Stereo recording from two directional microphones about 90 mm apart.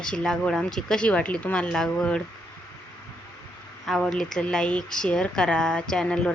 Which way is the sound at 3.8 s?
5° left (ahead or behind).